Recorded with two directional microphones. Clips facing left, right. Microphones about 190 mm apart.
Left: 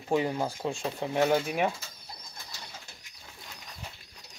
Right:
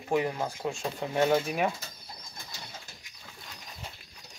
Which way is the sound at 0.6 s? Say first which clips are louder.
Left 1 dB; 10° left (ahead or behind).